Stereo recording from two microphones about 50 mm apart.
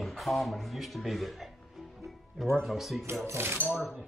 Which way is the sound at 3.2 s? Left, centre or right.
Right.